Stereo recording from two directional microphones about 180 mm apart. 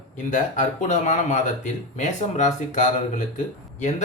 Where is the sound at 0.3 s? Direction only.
45° left (ahead or behind).